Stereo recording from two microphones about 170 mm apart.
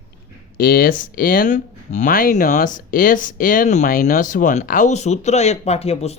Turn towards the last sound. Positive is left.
turn(degrees=35)  # may be behind; listen again after turning